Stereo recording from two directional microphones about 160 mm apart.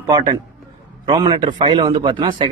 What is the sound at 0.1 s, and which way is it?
Speech, 20° right (ahead or behind).